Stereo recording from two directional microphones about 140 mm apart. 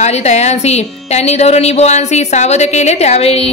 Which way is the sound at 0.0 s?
55° left (ahead or behind).